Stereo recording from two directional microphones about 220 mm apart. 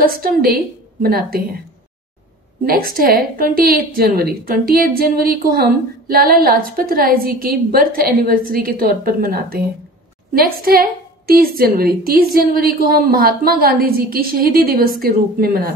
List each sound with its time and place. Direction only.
0.0 s a woman's voice: 40° right (ahead or behind)
2.6 s a woman's voice: 40° right (ahead or behind)